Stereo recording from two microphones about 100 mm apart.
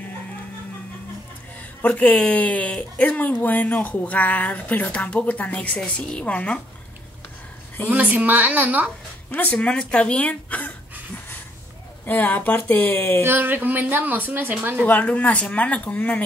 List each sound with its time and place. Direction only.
1.8 s speech: 15° left (ahead or behind)
7.9 s a woman's voice: 15° right (ahead or behind)
9.3 s speech: 15° left (ahead or behind)
12.1 s speech: 20° left (ahead or behind)
13.2 s a woman's voice: 20° right (ahead or behind)
14.9 s speech: 15° left (ahead or behind)